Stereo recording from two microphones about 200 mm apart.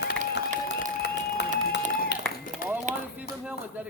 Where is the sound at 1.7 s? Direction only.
60° left (ahead or behind).